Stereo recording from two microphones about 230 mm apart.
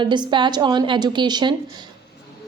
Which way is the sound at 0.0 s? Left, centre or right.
Centre.